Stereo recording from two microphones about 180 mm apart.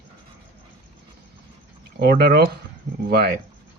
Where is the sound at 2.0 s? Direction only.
60° right (ahead or behind).